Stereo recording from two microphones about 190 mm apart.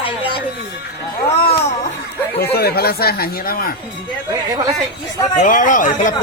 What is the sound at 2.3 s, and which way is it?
Speech, 55° left (ahead or behind).